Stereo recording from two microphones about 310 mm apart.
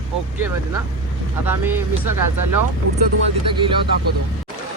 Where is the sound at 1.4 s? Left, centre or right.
Centre.